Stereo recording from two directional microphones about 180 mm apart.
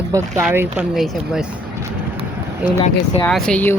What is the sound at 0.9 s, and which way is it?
Speech, centre (ahead or behind).